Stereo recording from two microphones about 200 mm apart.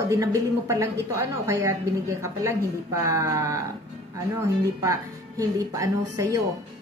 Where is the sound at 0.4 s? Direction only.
15° right (ahead or behind).